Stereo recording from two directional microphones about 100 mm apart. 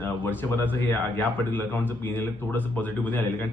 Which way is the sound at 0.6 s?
20° left (ahead or behind).